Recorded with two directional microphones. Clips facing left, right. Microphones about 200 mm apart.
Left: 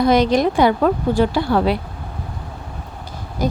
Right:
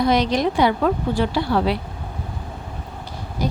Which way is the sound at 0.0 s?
50° left (ahead or behind).